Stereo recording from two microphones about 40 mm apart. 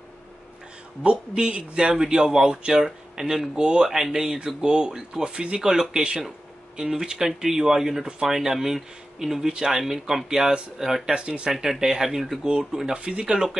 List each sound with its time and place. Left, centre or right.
1.0 s speech: right
2.8 s speech: centre
5.6 s speech: centre
11.2 s speech: right
11.5 s speech: centre
12.4 s speech: centre
13.2 s speech: centre